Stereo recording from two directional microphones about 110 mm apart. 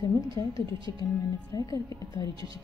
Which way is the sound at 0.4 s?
30° left (ahead or behind).